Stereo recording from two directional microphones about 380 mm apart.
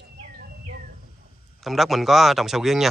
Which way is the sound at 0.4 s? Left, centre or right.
Right.